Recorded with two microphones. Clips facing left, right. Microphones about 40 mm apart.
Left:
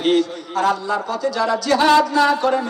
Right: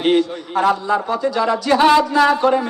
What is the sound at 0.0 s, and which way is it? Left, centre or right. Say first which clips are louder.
A man's voice: right 1 dB; right.